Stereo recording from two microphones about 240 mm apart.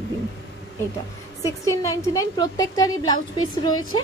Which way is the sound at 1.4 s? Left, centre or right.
Centre.